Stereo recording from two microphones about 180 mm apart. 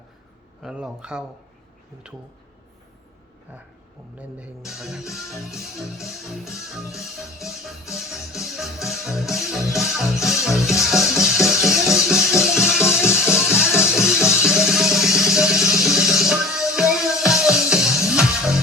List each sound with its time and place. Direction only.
0.6 s music: 5° right (ahead or behind)
4.2 s music: 5° right (ahead or behind)